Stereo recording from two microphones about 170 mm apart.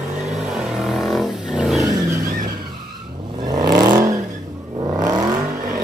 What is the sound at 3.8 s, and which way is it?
Vehicle, 20° right (ahead or behind).